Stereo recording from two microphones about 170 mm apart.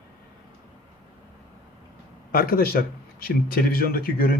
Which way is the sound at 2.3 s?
60° left (ahead or behind).